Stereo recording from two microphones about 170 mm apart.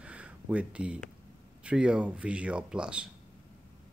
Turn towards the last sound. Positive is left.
turn(degrees=-5)  # may be behind; listen again after turning